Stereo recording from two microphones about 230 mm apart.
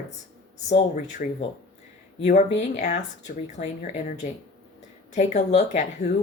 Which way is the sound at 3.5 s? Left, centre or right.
Left.